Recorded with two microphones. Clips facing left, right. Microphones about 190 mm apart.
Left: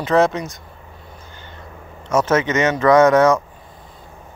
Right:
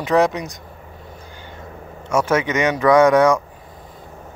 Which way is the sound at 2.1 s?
10° right (ahead or behind).